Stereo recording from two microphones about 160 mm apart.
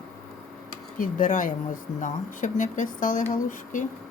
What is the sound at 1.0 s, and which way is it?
Speech, 55° left (ahead or behind).